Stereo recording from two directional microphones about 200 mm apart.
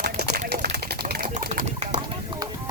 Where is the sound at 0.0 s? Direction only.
50° right (ahead or behind).